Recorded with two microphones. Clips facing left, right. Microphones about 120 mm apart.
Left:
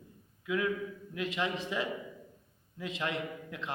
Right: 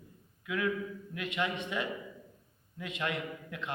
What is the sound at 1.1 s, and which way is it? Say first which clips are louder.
A man's voice: left 1 dB; 30° left (ahead or behind).